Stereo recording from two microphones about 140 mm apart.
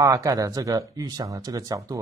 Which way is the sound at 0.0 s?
25° right (ahead or behind).